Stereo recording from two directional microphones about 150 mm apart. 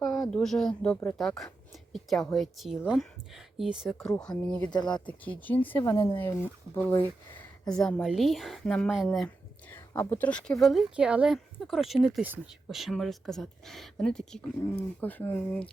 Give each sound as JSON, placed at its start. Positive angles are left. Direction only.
{"t": 0.0, "sound": "a woman's voice", "side_deg": 0}
{"t": 4.7, "sound": "speech", "side_deg": 30}
{"t": 5.0, "sound": "speech", "side_deg": 10}
{"t": 5.8, "sound": "speech", "side_deg": 25}
{"t": 7.7, "sound": "a woman's voice", "side_deg": 5}